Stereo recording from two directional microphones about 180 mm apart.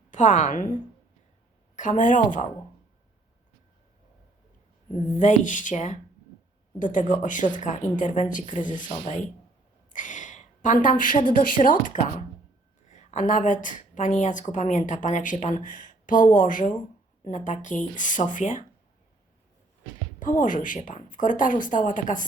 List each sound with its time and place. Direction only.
0.1 s a woman's voice: 45° left (ahead or behind)
4.9 s a woman's voice: 45° left (ahead or behind)
20.1 s a woman's voice: 45° left (ahead or behind)